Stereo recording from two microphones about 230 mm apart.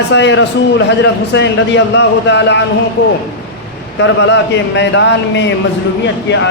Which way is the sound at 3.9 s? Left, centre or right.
Left.